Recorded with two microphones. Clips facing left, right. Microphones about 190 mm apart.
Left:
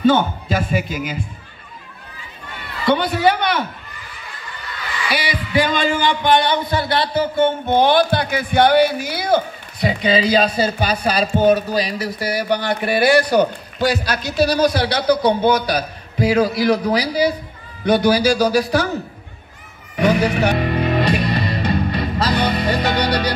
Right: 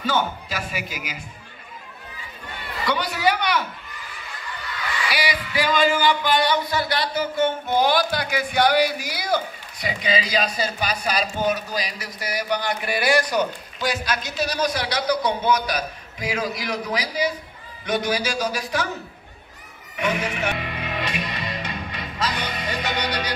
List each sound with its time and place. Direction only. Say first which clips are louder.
0.0 s a man's voice: left 9 dB; 30° left (ahead or behind)
2.9 s speech: left 7 dB; 25° left (ahead or behind)
5.1 s a man's voice: left 7 dB; 25° left (ahead or behind)
20.0 s music: left 9 dB; 35° left (ahead or behind)